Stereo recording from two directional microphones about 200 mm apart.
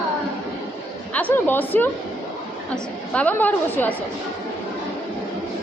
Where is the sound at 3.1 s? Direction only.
5° left (ahead or behind).